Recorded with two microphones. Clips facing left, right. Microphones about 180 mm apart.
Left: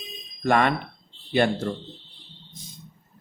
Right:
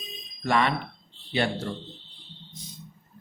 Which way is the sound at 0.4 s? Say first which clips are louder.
Left 3 dB; 50° left (ahead or behind).